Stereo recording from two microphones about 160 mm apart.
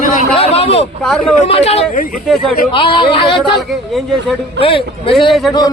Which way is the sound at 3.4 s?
Centre (ahead or behind).